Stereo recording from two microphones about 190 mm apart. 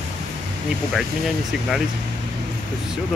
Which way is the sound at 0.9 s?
Centre (ahead or behind).